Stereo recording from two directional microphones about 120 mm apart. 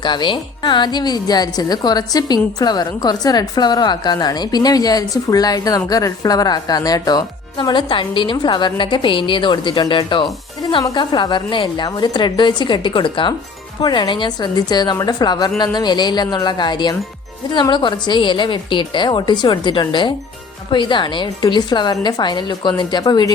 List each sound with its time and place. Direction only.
0.0 s a woman's voice: 40° left (ahead or behind)